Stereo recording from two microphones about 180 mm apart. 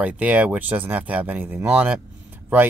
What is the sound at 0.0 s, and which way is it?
Speech, 10° right (ahead or behind).